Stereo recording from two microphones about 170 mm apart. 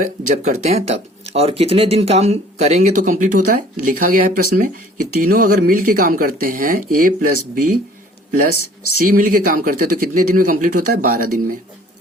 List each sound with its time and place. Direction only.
0.0 s speech: 40° right (ahead or behind)
9.0 s a man's voice: 55° right (ahead or behind)